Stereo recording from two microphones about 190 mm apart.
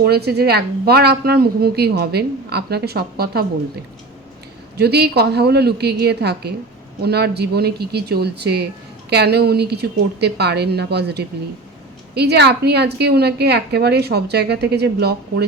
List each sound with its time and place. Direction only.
0.0 s speech: 55° right (ahead or behind)
4.8 s speech: 60° right (ahead or behind)